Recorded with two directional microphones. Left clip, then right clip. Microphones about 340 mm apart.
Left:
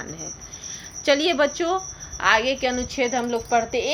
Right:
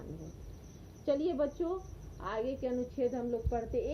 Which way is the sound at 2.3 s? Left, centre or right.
Centre.